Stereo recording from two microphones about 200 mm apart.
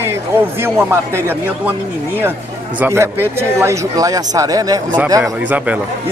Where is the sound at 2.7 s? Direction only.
10° right (ahead or behind).